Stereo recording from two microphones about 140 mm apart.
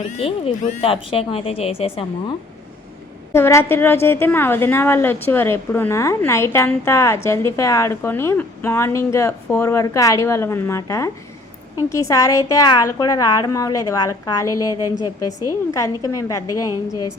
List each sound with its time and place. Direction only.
0.1 s speech: 45° left (ahead or behind)
3.3 s a woman's voice: 20° left (ahead or behind)